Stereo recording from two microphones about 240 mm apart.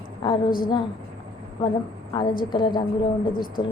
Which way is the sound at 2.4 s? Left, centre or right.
Centre.